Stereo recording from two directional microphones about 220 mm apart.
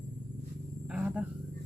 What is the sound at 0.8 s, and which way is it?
Roaring cats, 5° right (ahead or behind).